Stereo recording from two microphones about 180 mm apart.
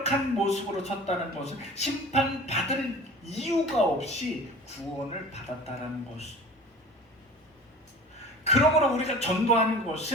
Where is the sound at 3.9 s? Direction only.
35° left (ahead or behind).